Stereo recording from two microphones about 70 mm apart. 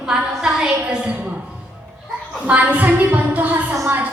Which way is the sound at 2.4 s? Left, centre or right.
Centre.